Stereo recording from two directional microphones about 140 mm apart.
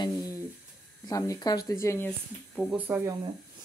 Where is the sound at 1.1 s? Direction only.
25° left (ahead or behind).